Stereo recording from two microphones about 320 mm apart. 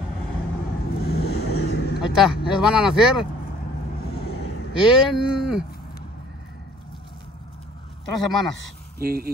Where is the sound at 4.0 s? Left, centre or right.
Left.